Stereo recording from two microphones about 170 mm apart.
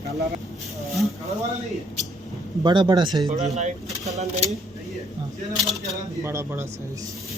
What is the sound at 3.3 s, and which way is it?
Speech, 45° right (ahead or behind).